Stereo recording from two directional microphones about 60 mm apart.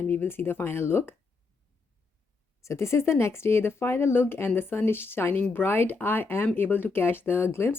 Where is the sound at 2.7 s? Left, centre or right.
Left.